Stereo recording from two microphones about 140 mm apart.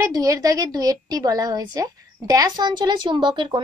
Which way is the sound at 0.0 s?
25° right (ahead or behind).